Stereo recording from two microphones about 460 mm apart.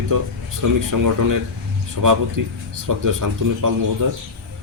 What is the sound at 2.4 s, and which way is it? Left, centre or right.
Speech, right.